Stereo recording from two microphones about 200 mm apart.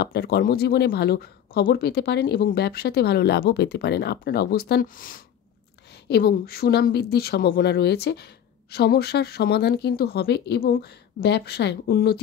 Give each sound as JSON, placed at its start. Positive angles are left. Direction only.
{"t": 0.0, "sound": "speech", "side_deg": 50}